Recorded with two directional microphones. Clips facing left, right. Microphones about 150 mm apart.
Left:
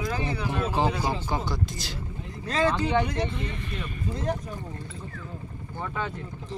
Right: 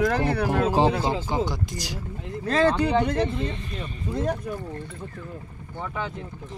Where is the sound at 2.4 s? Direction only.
55° right (ahead or behind).